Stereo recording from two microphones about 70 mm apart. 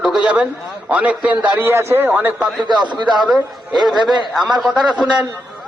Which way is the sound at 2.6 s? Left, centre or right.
Right.